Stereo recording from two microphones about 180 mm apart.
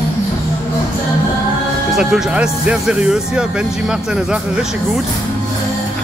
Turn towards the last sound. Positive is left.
turn(degrees=-5)  # may be behind; listen again after turning